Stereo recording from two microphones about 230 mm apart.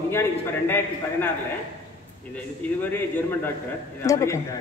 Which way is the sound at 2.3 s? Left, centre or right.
Centre.